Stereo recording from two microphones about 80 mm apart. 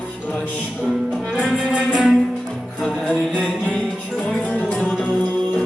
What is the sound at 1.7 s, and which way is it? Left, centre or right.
Music, centre.